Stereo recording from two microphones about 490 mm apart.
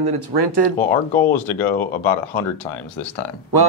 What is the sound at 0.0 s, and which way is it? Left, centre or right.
Speech, right.